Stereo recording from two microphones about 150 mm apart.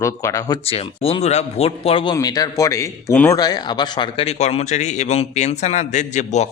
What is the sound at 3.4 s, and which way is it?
A man's voice, 25° left (ahead or behind).